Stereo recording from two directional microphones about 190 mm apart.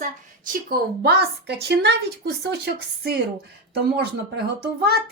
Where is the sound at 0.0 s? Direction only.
50° right (ahead or behind).